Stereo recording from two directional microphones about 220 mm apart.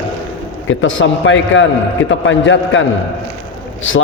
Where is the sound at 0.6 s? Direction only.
60° left (ahead or behind).